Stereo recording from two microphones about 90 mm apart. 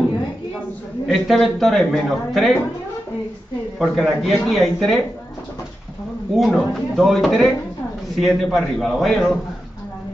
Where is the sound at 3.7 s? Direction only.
Centre (ahead or behind).